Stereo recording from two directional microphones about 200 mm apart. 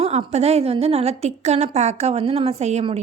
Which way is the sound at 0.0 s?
30° right (ahead or behind).